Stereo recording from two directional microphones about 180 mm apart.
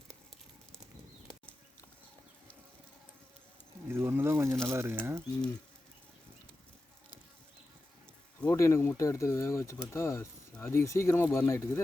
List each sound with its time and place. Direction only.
3.8 s insect: 15° right (ahead or behind)
4.6 s speech: 15° right (ahead or behind)
8.4 s speech: 15° left (ahead or behind)